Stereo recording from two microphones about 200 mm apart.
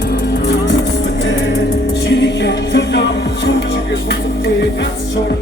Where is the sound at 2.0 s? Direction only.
60° left (ahead or behind).